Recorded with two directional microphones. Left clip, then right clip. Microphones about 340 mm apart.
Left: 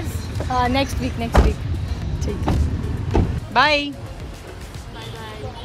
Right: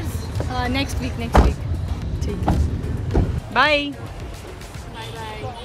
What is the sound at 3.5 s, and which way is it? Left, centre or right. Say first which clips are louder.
Speech: left 1 dB; centre.